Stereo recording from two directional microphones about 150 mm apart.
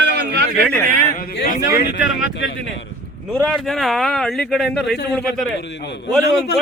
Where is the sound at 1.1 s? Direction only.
70° left (ahead or behind).